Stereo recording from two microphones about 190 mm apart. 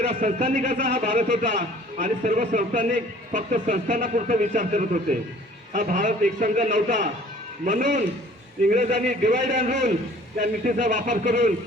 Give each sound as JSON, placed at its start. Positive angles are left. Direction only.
{"t": 0.1, "sound": "a man's voice", "side_deg": -40}